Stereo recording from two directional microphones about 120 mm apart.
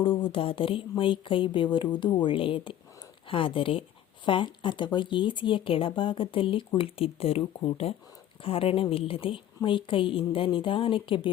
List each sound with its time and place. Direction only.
0.0 s speech: 45° left (ahead or behind)